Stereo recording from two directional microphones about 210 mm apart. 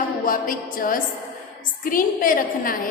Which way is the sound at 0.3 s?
40° left (ahead or behind).